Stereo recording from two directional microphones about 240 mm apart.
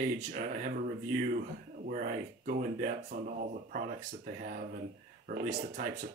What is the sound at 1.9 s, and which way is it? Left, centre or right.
Speech, right.